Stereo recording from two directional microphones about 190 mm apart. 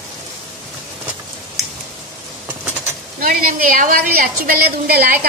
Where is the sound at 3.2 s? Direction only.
45° right (ahead or behind).